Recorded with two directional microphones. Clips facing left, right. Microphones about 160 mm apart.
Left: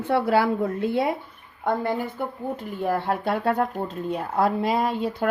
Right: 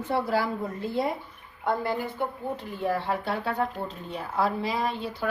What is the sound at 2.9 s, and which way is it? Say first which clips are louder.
Speech: left 4 dB; 55° left (ahead or behind).